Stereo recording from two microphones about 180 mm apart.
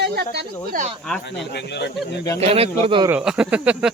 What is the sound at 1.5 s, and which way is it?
Speech, 65° left (ahead or behind).